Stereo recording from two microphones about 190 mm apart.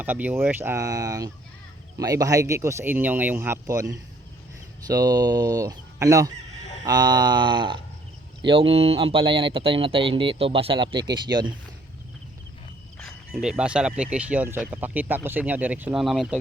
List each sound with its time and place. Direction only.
0.0 s speech: 10° right (ahead or behind)
13.4 s speech: 5° right (ahead or behind)